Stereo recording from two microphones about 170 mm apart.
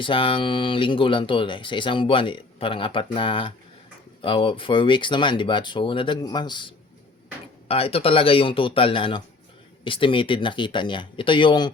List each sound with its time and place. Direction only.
0.0 s a man's voice: 30° left (ahead or behind)